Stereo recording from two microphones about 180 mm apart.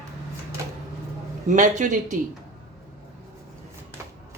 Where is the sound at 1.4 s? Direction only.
45° right (ahead or behind).